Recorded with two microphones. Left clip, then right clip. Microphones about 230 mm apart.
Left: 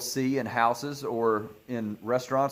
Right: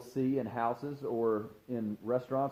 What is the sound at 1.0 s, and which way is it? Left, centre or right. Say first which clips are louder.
Speech: left 5 dB; left.